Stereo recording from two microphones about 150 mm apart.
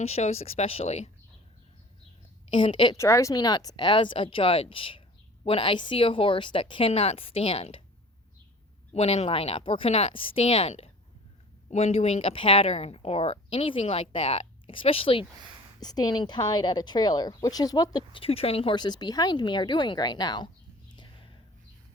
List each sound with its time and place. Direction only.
0.0 s speech: 45° left (ahead or behind)
2.5 s speech: 35° left (ahead or behind)
3.0 s speech: 20° left (ahead or behind); by 7.8 s 40° left (ahead or behind)
8.9 s speech: 45° left (ahead or behind)
15.8 s a woman's voice: 25° left (ahead or behind)
20.9 s whispering: 30° left (ahead or behind)